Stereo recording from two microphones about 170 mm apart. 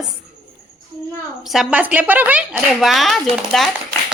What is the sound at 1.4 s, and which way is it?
A woman's voice, centre (ahead or behind).